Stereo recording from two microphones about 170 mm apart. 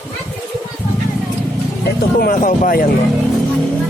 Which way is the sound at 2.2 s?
55° left (ahead or behind).